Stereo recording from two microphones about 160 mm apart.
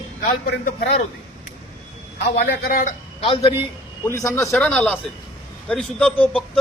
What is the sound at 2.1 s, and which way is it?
Speech, 90° left.